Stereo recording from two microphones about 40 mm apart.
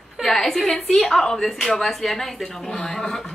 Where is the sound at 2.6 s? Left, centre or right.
Centre.